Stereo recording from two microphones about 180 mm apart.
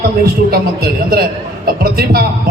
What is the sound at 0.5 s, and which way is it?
A man's voice, 60° right (ahead or behind).